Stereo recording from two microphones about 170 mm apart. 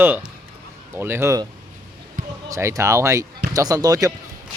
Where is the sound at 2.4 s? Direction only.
20° right (ahead or behind).